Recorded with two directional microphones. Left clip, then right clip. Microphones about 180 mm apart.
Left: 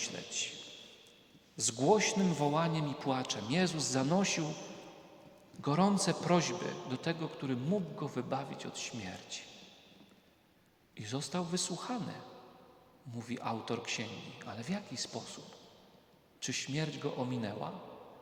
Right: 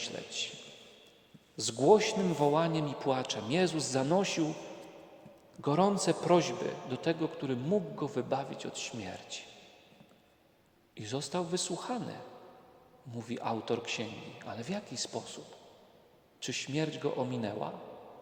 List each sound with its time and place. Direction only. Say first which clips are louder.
0.2 s a sound: right 1 dB; 10° right (ahead or behind)
1.8 s a man's voice: right 4 dB; 10° right (ahead or behind)
5.5 s a man's voice: right 3 dB; 10° right (ahead or behind)
10.9 s a man's voice: right 3 dB; 15° right (ahead or behind)
16.4 s a man's voice: right 3 dB; 15° right (ahead or behind)